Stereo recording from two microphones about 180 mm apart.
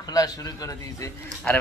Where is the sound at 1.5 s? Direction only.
5° left (ahead or behind).